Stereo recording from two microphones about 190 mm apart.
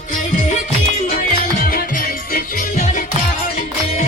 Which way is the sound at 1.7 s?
50° left (ahead or behind).